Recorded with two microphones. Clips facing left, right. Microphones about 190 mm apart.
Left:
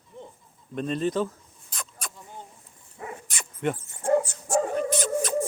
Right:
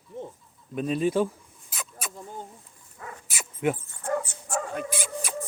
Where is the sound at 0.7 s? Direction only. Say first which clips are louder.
Right 2 dB; 5° right (ahead or behind).